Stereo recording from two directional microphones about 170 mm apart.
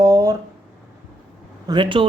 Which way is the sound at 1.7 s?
30° right (ahead or behind).